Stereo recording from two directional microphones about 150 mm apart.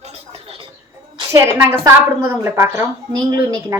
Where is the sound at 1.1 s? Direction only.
20° right (ahead or behind).